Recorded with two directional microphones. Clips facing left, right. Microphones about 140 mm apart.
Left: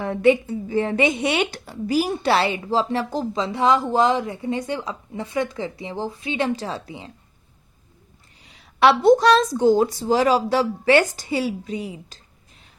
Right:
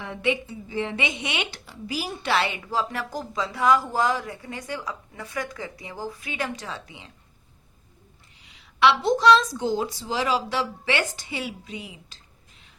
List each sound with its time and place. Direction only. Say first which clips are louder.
0.0 s speech: left 9 dB; 45° left (ahead or behind)
8.5 s a woman's voice: left 4 dB; 45° left (ahead or behind)